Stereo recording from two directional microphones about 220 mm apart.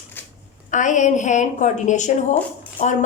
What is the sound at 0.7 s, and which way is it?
A woman's voice, 35° left (ahead or behind).